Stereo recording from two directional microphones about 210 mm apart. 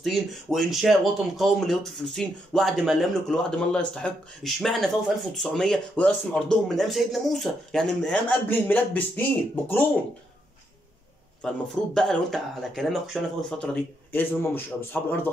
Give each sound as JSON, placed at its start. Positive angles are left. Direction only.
{"t": 0.0, "sound": "speech", "side_deg": 0}
{"t": 11.4, "sound": "a man's voice", "side_deg": 5}